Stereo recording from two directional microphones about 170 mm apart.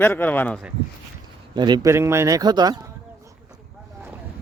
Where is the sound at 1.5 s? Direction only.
25° right (ahead or behind).